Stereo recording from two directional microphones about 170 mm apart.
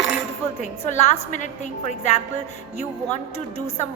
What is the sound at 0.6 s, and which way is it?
A woman's voice, 40° left (ahead or behind).